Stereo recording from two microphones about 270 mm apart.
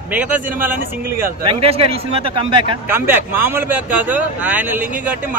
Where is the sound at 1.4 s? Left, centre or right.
Right.